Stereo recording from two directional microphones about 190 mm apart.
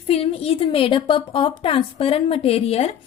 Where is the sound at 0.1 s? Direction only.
30° left (ahead or behind).